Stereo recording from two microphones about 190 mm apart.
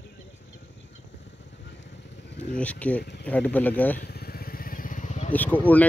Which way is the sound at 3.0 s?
65° left (ahead or behind).